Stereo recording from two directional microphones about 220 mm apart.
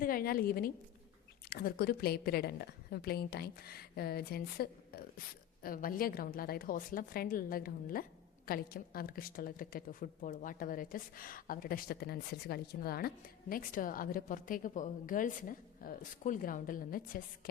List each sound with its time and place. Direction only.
0.0 s a woman's voice: 40° left (ahead or behind)